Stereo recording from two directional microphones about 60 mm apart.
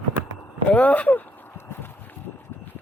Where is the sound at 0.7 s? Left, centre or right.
Left.